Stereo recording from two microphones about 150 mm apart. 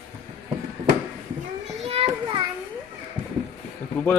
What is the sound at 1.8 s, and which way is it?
Children playing, 40° right (ahead or behind).